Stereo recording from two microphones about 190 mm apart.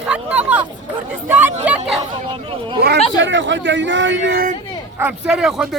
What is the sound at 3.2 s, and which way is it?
Speech, 75° right (ahead or behind).